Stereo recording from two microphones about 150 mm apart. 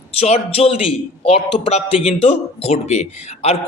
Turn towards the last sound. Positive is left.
turn(degrees=45)  # may be behind; listen again after turning